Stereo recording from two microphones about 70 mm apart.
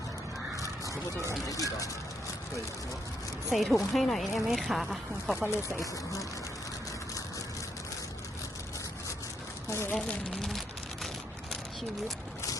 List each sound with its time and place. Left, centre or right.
1.5 s speech: left
3.5 s speech: centre
5.5 s speech: left
9.6 s speech: left